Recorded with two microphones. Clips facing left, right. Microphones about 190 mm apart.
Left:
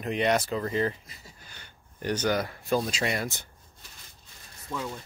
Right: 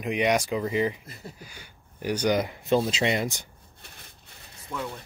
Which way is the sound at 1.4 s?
10° right (ahead or behind).